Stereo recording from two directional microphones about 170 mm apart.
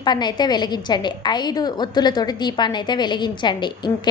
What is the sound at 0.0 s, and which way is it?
A woman's voice, 25° left (ahead or behind).